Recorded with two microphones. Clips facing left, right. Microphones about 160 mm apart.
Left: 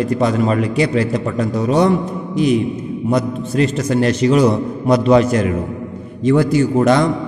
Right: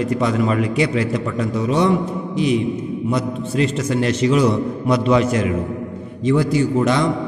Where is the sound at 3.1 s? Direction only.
40° left (ahead or behind).